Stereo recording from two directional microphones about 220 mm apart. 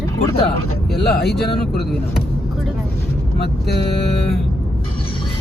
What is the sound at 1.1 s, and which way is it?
Speech, 45° left (ahead or behind).